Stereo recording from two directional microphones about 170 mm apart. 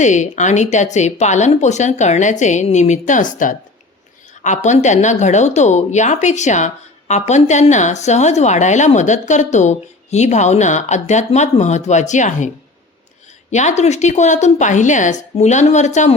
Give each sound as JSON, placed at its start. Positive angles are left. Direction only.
{"t": 0.0, "sound": "a woman's voice", "side_deg": 45}
{"t": 13.5, "sound": "a woman's voice", "side_deg": 45}